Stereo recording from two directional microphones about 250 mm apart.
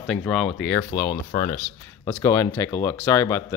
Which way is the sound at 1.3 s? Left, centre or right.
Left.